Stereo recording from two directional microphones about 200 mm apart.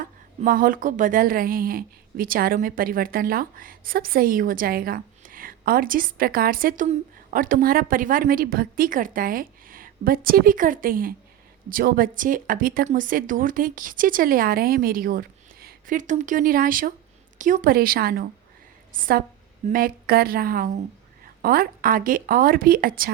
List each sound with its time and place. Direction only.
0.0 s a woman's voice: 45° right (ahead or behind)